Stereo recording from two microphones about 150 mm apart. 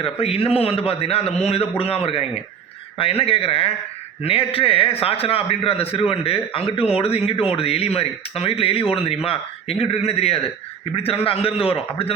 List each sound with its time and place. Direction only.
0.0 s a man's voice: 40° left (ahead or behind)